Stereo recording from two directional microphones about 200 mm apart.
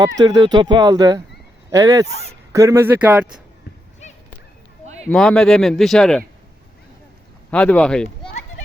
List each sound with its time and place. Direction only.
0.2 s speech: 20° right (ahead or behind)
5.1 s speech: 5° left (ahead or behind)
7.5 s speech: 5° left (ahead or behind)